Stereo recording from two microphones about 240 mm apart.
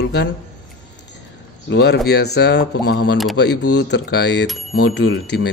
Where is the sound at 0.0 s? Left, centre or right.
Left.